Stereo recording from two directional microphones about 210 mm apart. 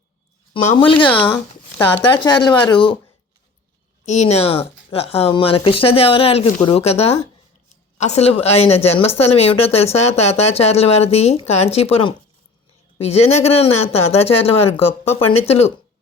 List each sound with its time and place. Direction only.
0.5 s speech: 25° left (ahead or behind)
4.0 s speech: 35° left (ahead or behind)